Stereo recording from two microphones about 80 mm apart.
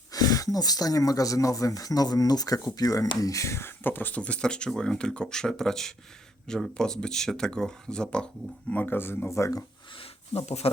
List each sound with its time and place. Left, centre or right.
0.1 s speech: left; by 8.3 s centre
8.7 s speech: left